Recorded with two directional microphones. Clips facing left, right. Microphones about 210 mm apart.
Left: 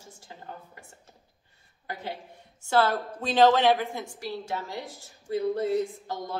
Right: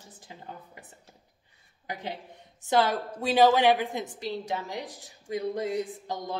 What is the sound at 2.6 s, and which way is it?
A woman's voice, 15° right (ahead or behind).